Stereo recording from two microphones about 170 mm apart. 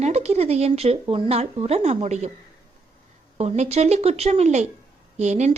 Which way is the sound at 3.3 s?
40° right (ahead or behind).